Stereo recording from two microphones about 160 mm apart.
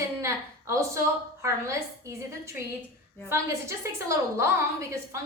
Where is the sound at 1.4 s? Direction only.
20° right (ahead or behind).